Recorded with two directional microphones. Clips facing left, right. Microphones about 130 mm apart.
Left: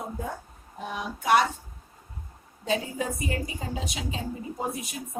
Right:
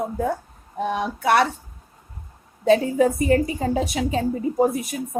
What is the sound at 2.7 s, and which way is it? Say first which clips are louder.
A woman's voice: right 12 dB; 55° right (ahead or behind).